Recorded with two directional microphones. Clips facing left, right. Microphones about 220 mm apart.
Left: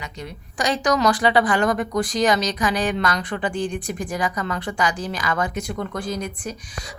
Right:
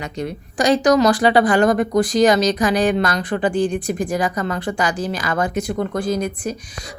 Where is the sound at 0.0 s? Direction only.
45° right (ahead or behind).